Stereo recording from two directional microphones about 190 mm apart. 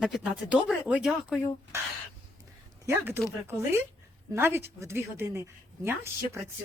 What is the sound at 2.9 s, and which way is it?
Speech, 10° right (ahead or behind).